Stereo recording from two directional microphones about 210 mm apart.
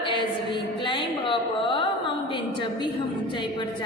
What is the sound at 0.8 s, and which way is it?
Carnatic music, 25° left (ahead or behind).